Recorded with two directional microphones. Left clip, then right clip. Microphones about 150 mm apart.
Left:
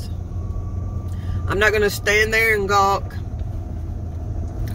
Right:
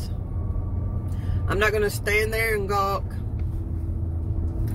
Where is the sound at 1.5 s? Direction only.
20° left (ahead or behind).